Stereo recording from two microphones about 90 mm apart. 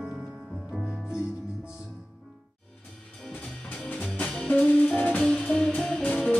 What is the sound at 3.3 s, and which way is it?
Music, 15° left (ahead or behind).